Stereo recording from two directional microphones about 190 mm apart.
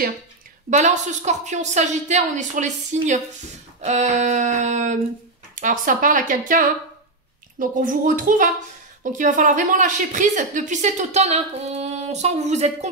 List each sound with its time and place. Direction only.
0.7 s a woman's voice: 40° right (ahead or behind)